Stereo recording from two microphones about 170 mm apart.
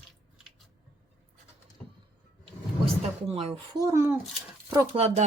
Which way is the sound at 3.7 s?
15° right (ahead or behind).